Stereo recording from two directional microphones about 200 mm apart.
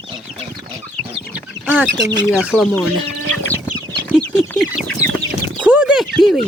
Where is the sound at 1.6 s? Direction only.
10° right (ahead or behind).